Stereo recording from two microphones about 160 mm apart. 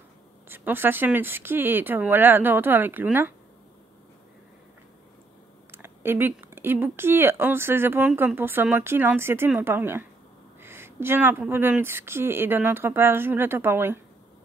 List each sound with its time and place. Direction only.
0.5 s speech: 15° right (ahead or behind)
5.7 s speech: 15° right (ahead or behind)